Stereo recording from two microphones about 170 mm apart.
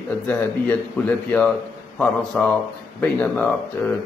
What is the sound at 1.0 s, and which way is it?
Speech, 10° left (ahead or behind).